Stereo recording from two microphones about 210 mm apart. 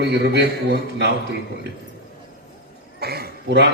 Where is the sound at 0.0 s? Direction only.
50° right (ahead or behind).